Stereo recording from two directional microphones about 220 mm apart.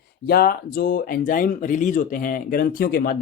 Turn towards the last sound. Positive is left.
turn(degrees=40)  # may be behind; listen again after turning